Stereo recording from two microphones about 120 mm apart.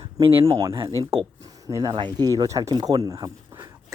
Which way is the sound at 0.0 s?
45° right (ahead or behind).